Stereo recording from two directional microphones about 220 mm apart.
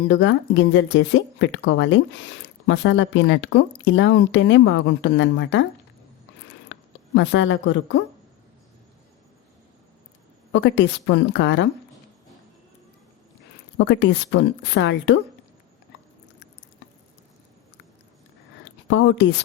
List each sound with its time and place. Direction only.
0.1 s speech: 55° left (ahead or behind)
6.7 s speech: 55° left (ahead or behind)
10.5 s speech: 55° left (ahead or behind)
13.7 s speech: 50° left (ahead or behind)
18.9 s speech: 55° left (ahead or behind)